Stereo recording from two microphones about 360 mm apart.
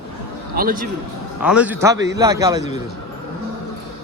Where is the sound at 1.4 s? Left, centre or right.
Centre.